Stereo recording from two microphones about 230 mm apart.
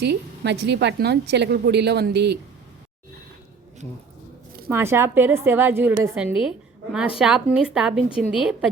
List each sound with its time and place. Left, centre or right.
0.0 s a woman's voice: right
4.7 s a woman's voice: centre